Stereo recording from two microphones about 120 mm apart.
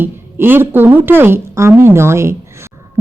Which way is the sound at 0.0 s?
15° right (ahead or behind).